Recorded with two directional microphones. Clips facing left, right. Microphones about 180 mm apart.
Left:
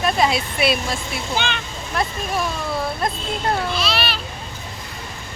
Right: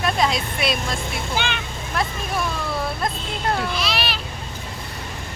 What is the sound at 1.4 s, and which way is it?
Speech, 10° right (ahead or behind).